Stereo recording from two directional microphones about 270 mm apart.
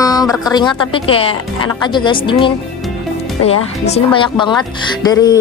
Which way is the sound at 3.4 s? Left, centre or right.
Left.